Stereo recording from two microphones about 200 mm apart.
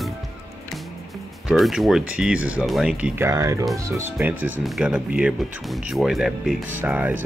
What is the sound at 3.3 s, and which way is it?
Speech, 15° right (ahead or behind).